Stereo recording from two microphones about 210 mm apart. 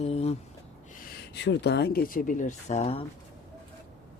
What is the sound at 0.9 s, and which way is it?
Speech, 55° left (ahead or behind).